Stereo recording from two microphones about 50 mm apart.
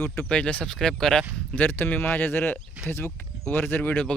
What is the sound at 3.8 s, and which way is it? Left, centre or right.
Speech, left.